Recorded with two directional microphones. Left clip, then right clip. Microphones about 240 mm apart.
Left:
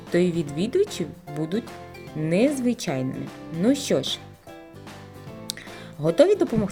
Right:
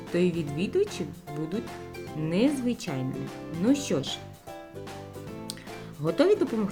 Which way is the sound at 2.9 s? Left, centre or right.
Left.